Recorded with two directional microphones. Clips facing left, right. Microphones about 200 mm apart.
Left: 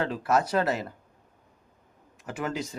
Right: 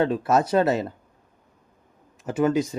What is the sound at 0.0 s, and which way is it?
Speech, 25° right (ahead or behind).